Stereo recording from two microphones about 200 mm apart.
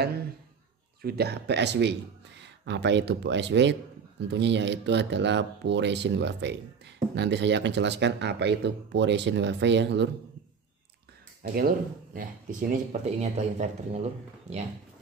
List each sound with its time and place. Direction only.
1.0 s speech: 55° right (ahead or behind)
11.5 s speech: 45° right (ahead or behind)